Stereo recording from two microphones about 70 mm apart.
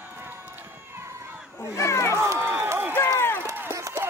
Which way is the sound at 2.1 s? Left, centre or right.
Right.